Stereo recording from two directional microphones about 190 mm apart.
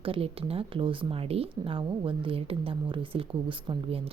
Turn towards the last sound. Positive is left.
turn(degrees=-30)  # may be behind; listen again after turning